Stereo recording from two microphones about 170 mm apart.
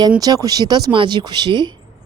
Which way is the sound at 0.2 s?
20° right (ahead or behind).